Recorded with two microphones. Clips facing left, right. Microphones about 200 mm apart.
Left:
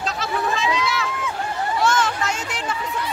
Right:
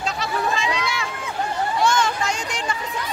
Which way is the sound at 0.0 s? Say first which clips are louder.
Even; centre (ahead or behind).